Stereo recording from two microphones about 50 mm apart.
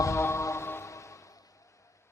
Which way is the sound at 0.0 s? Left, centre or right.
Left.